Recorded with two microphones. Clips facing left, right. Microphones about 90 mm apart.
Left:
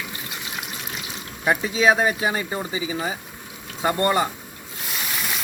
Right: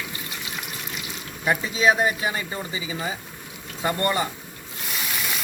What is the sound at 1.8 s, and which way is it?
Speech, 25° left (ahead or behind).